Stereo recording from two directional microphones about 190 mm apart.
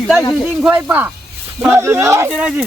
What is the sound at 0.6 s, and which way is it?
Speech, 10° right (ahead or behind).